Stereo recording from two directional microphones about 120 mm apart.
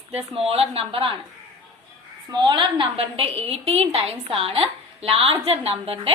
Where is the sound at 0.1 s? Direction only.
55° right (ahead or behind).